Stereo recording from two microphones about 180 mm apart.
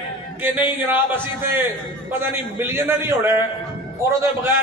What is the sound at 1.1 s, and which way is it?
A man's voice, 10° right (ahead or behind).